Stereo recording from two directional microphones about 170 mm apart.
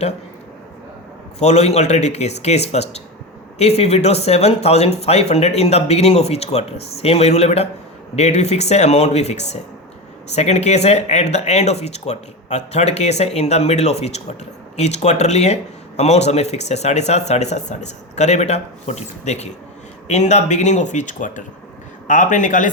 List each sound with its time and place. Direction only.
1.4 s speech: 40° left (ahead or behind)